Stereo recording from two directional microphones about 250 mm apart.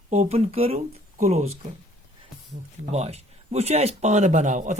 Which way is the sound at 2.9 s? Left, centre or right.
Right.